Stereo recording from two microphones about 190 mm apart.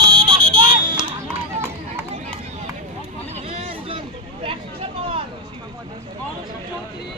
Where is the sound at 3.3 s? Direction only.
30° right (ahead or behind).